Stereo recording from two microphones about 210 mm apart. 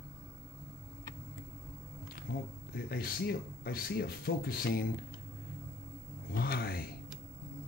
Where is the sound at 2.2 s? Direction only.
45° left (ahead or behind).